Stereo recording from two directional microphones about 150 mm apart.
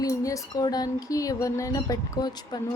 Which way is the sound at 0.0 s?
20° left (ahead or behind).